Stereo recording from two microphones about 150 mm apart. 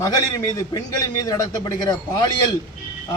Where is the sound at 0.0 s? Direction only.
25° left (ahead or behind).